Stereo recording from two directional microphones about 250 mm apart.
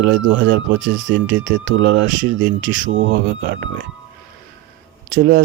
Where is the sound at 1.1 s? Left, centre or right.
Right.